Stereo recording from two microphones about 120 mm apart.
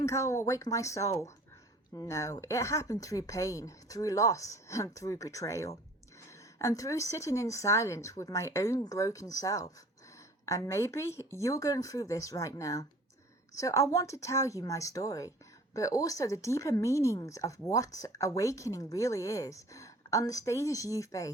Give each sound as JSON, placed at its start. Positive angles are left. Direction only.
{"t": 0.0, "sound": "speech", "side_deg": 25}